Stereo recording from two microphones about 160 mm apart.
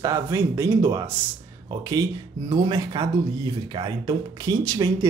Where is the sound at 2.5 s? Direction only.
20° right (ahead or behind).